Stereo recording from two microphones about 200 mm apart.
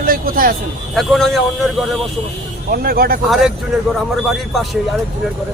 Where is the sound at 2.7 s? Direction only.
50° right (ahead or behind).